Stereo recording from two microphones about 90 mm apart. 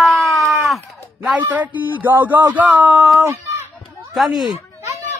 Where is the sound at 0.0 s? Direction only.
Centre (ahead or behind).